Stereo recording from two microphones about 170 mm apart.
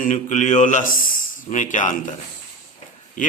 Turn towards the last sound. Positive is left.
turn(degrees=50)  # may be behind; listen again after turning